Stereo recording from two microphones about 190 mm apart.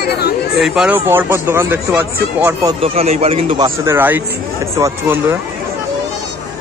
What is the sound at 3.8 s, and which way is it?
Speech, 10° right (ahead or behind).